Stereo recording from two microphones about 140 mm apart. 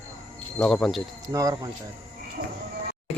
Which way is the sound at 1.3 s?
25° right (ahead or behind).